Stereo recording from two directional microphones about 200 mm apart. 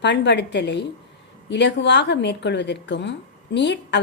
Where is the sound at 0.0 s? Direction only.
60° left (ahead or behind).